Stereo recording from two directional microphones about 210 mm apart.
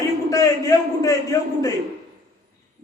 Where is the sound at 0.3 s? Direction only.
15° left (ahead or behind).